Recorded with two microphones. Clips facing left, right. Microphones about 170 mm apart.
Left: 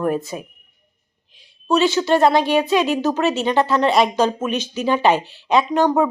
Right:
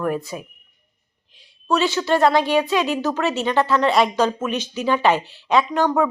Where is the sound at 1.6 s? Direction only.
20° left (ahead or behind).